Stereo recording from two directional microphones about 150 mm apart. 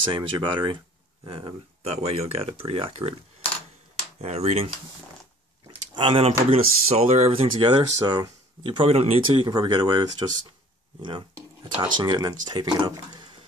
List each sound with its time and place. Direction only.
0.0 s speech: 35° right (ahead or behind)
4.2 s speech: 45° right (ahead or behind)
5.9 s speech: 35° right (ahead or behind)